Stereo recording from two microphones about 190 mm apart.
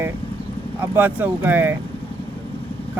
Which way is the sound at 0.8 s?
10° right (ahead or behind).